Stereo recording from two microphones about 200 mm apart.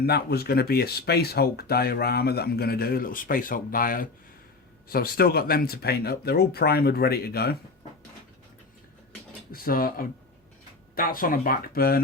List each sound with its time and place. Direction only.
0.0 s speech: 50° left (ahead or behind)
9.5 s speech: 45° left (ahead or behind)